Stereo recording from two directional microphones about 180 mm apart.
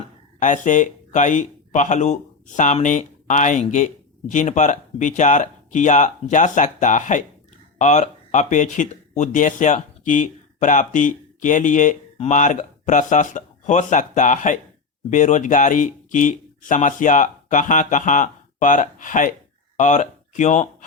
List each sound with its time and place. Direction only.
0.3 s speech: 45° left (ahead or behind)